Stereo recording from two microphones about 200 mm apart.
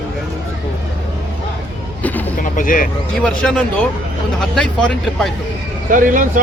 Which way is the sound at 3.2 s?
5° left (ahead or behind).